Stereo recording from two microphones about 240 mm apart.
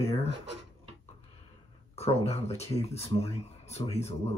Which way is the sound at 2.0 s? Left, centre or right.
Left.